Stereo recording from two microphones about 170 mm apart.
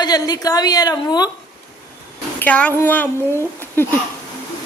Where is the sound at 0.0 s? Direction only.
25° left (ahead or behind).